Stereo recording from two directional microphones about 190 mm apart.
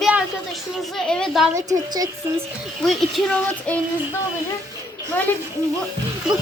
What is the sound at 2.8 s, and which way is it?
Speech, centre (ahead or behind).